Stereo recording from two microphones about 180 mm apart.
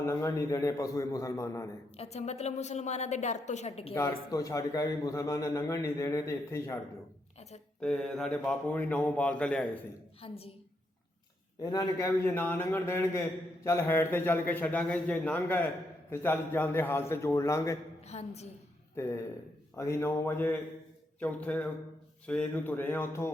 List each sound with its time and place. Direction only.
0.0 s a man's voice: 15° left (ahead or behind)
2.0 s a woman's voice: 35° left (ahead or behind)
3.9 s a man's voice: 20° left (ahead or behind)
7.8 s a man's voice: 5° left (ahead or behind)
10.2 s a woman's voice: 30° left (ahead or behind)
11.6 s a man's voice: 20° left (ahead or behind)
18.0 s a woman's voice: 35° left (ahead or behind)
19.0 s a man's voice: 15° left (ahead or behind)